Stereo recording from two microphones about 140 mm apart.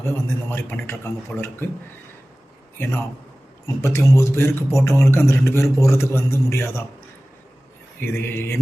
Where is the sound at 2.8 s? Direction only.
15° left (ahead or behind).